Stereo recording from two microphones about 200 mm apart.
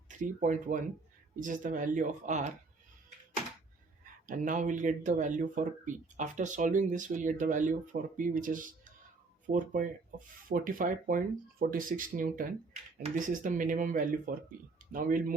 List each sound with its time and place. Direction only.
0.1 s speech: 40° right (ahead or behind)
4.3 s speech: 40° right (ahead or behind)